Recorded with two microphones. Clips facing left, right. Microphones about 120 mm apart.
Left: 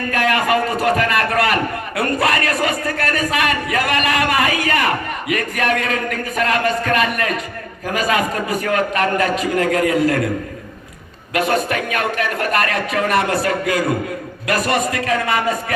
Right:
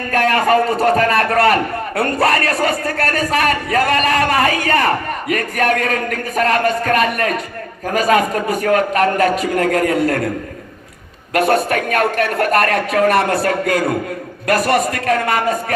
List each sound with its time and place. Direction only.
0.1 s a man's voice: 35° right (ahead or behind)
11.3 s speech: 45° right (ahead or behind)